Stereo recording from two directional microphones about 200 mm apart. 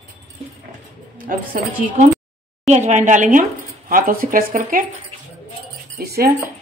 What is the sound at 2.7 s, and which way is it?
A woman's voice, 35° right (ahead or behind).